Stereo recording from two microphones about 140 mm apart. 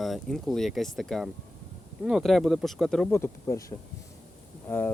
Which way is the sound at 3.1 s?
20° left (ahead or behind).